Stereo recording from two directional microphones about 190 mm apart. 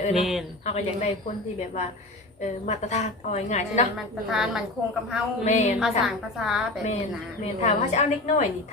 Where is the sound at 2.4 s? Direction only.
35° left (ahead or behind).